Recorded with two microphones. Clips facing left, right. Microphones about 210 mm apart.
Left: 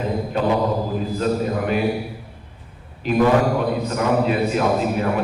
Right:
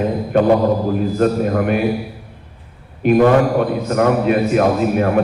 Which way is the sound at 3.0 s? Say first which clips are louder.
Right 5 dB; 55° right (ahead or behind).